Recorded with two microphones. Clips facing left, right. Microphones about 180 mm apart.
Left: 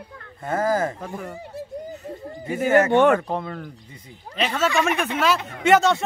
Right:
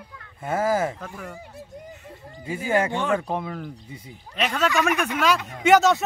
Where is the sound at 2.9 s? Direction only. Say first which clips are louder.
Left 8 dB; 60° left (ahead or behind).